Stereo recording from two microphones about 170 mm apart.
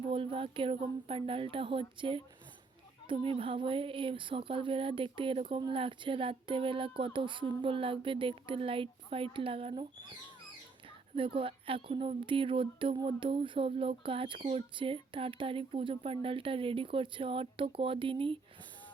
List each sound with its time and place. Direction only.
0.1 s speech: 30° right (ahead or behind)
11.3 s speech: 30° right (ahead or behind)